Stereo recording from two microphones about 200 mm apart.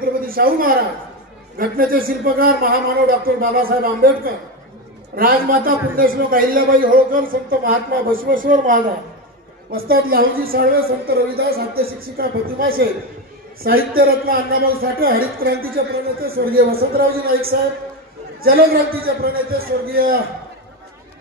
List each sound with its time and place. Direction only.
0.0 s a sound: 45° right (ahead or behind)
1.6 s a man's voice: 45° right (ahead or behind)
18.4 s a man's voice: 50° right (ahead or behind)